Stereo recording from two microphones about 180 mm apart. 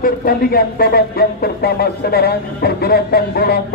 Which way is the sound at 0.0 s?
55° left (ahead or behind).